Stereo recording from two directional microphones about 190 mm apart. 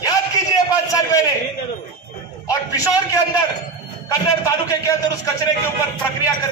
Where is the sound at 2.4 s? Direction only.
15° left (ahead or behind).